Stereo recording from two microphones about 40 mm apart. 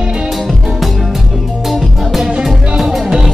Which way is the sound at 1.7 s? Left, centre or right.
Centre.